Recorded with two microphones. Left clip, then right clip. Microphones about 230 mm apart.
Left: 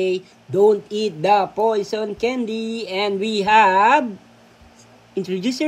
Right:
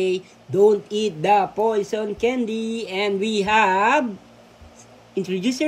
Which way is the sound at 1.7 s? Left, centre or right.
Centre.